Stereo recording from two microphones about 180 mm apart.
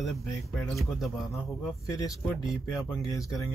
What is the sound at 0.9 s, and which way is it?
Speech, centre (ahead or behind).